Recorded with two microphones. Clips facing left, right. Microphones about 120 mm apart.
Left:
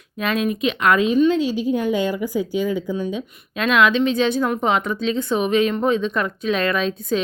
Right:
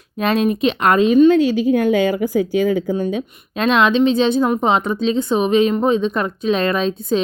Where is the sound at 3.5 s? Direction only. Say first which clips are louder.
Right 2 dB; 30° right (ahead or behind).